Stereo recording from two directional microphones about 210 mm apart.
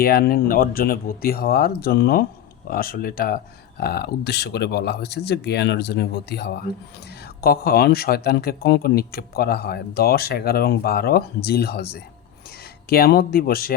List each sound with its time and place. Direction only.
0.0 s speech: 45° left (ahead or behind)